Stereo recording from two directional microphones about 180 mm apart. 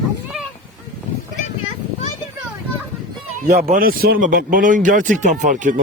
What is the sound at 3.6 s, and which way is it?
Speech, 50° right (ahead or behind).